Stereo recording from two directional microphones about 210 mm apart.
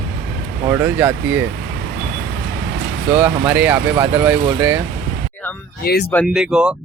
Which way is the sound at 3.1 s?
5° right (ahead or behind).